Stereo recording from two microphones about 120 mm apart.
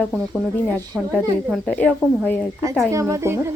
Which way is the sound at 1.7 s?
10° left (ahead or behind).